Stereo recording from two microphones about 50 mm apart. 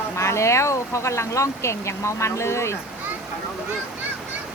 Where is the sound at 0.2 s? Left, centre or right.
Left.